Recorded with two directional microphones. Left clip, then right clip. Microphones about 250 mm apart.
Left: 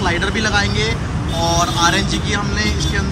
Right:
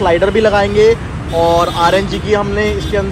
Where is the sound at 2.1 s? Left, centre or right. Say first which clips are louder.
Right 6 dB; left.